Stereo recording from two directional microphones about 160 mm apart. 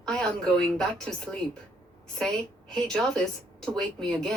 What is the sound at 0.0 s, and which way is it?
A woman's voice, 5° left (ahead or behind).